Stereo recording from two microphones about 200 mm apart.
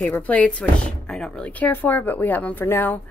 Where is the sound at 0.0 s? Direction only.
10° left (ahead or behind).